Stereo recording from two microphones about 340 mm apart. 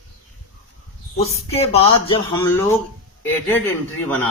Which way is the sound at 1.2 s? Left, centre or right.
Centre.